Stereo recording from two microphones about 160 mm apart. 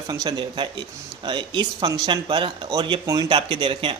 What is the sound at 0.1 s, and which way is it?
Speech, 25° right (ahead or behind).